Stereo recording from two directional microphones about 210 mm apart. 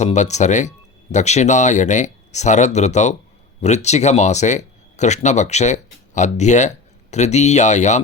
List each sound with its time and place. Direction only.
0.0 s speech: 35° left (ahead or behind)